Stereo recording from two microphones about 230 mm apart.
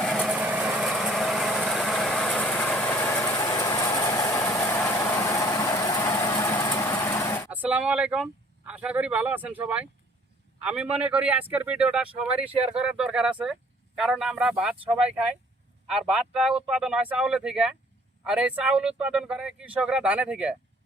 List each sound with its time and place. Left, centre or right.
0.0 s vehicle: centre
7.5 s a man's voice: centre